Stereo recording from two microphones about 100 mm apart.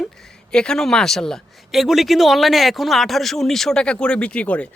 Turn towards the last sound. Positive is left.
turn(degrees=15)  # may be behind; listen again after turning